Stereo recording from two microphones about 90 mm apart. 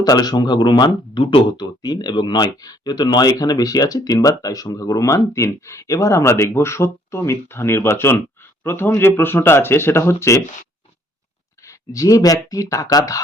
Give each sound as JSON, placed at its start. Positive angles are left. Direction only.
{"t": 0.0, "sound": "speech", "side_deg": 50}
{"t": 11.6, "sound": "speech", "side_deg": 35}